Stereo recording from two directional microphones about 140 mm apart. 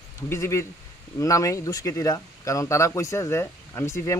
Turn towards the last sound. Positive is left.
turn(degrees=20)  # may be behind; listen again after turning